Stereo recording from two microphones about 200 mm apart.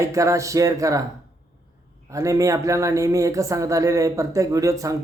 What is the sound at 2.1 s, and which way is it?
Speech, 15° right (ahead or behind).